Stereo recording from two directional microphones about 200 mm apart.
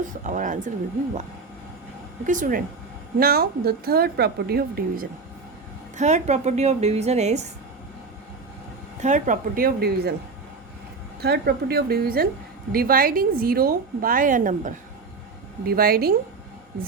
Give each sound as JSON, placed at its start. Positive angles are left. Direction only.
{"t": 0.0, "sound": "a woman's voice", "side_deg": -40}
{"t": 2.2, "sound": "a woman's voice", "side_deg": -40}
{"t": 6.0, "sound": "a woman's voice", "side_deg": -35}
{"t": 9.0, "sound": "a woman's voice", "side_deg": -35}
{"t": 11.2, "sound": "a woman's voice", "side_deg": -50}